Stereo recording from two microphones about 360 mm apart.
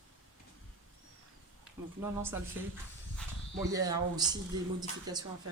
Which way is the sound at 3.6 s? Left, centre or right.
Centre.